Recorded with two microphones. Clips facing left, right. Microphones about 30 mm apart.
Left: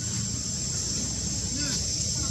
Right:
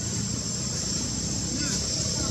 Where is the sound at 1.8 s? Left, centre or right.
Right.